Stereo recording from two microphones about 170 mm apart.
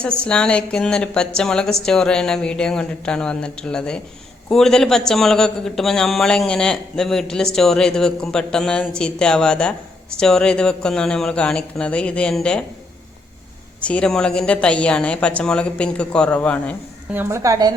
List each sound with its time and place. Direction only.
0.3 s a man's voice: 5° left (ahead or behind)
13.8 s a woman's voice: 5° left (ahead or behind)
17.2 s a woman's voice: 15° right (ahead or behind)